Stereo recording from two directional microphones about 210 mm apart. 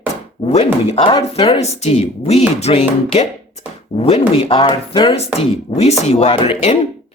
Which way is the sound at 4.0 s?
30° left (ahead or behind).